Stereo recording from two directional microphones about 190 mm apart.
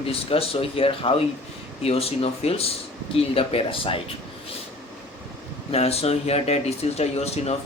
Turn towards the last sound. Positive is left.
turn(degrees=35)  # may be behind; listen again after turning